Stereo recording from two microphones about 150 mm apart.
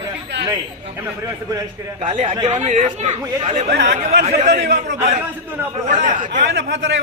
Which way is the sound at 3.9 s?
90° right.